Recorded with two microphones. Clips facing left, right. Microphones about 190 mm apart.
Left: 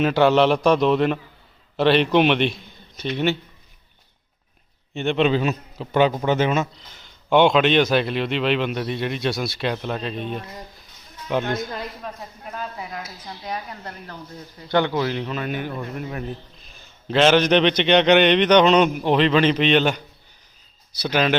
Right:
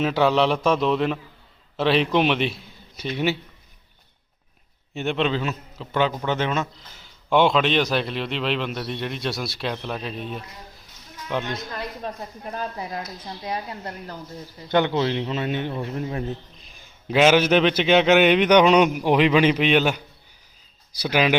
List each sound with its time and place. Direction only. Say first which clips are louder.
0.0 s a man's voice: left 3 dB; centre (ahead or behind)
4.9 s a man's voice: left 3 dB; 5° right (ahead or behind)
5.2 s a man's voice: left 6 dB; 15° left (ahead or behind); by 10.4 s centre (ahead or behind)
12.5 s speech: right 2 dB; 30° right (ahead or behind)
13.0 s a man's voice: right 2 dB; 5° left (ahead or behind)
13.2 s a man's voice: left 1 dB; 25° right (ahead or behind)
16.7 s a man's voice: even; 10° right (ahead or behind)